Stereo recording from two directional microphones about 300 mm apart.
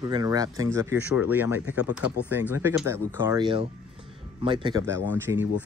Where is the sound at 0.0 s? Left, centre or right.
Centre.